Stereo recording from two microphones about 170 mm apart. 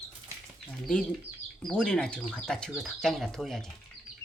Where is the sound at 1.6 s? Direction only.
5° left (ahead or behind).